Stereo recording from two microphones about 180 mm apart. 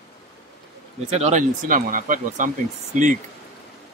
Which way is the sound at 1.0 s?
35° right (ahead or behind).